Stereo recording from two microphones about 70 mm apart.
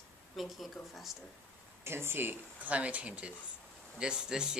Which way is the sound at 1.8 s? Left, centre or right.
Right.